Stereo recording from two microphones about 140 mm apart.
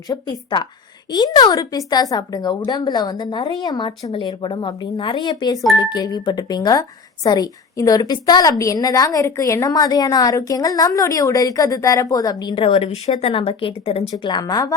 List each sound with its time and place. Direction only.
0.1 s a woman's voice: 30° left (ahead or behind)